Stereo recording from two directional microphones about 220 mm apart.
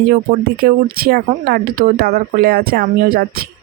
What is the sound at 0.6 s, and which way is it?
Speech, 45° right (ahead or behind).